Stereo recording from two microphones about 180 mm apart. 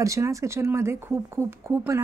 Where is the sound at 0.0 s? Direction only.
15° right (ahead or behind).